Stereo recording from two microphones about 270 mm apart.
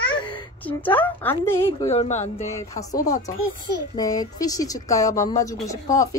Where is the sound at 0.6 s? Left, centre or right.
Centre.